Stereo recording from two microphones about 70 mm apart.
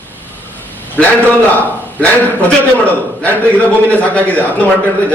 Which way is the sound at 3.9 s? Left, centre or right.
Left.